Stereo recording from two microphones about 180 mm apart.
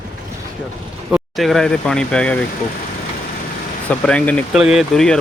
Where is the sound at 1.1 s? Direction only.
Centre (ahead or behind).